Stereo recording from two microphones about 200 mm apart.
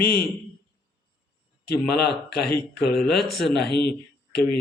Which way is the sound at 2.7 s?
Centre (ahead or behind).